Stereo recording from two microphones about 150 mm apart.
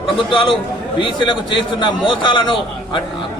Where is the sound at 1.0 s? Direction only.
30° left (ahead or behind).